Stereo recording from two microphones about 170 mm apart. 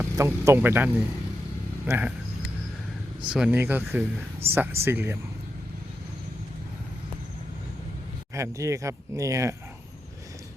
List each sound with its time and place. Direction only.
0.0 s speech: 15° right (ahead or behind)
1.9 s speech: 10° right (ahead or behind)
3.3 s speech: 10° right (ahead or behind)
8.4 s speech: 20° right (ahead or behind)